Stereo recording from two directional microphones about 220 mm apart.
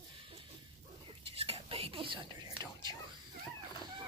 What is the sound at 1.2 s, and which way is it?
Whispering, 25° right (ahead or behind).